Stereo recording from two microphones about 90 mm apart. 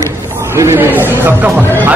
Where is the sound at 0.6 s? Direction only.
25° right (ahead or behind).